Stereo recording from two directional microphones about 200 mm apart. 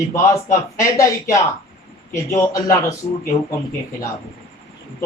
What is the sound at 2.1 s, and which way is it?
Speech, 15° left (ahead or behind).